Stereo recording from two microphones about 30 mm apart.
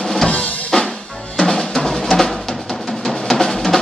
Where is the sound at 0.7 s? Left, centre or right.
Left.